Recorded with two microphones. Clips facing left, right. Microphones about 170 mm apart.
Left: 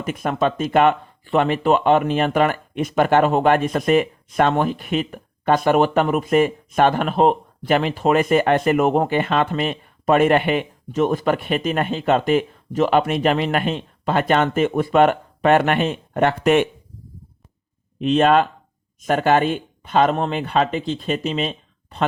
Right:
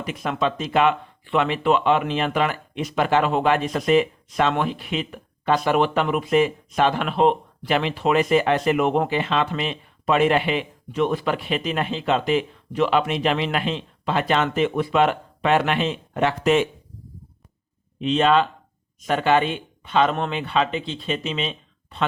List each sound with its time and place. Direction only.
0.0 s speech: 45° left (ahead or behind)
18.0 s speech: 50° left (ahead or behind)